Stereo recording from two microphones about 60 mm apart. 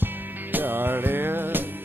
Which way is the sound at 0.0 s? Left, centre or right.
Right.